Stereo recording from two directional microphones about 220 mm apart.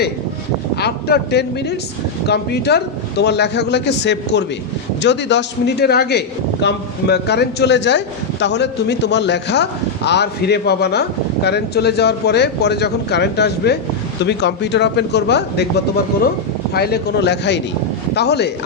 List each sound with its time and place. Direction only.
0.8 s a man's voice: 45° left (ahead or behind)